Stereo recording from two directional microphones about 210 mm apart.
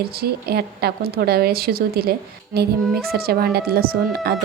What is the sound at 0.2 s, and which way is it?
A woman's voice, 50° right (ahead or behind).